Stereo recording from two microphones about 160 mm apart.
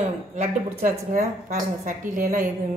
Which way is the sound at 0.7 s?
55° right (ahead or behind).